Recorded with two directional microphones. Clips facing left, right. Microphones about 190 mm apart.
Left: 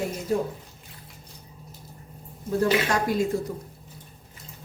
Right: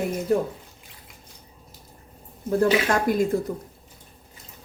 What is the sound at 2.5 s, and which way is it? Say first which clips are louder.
Speech: right 2 dB; 50° right (ahead or behind).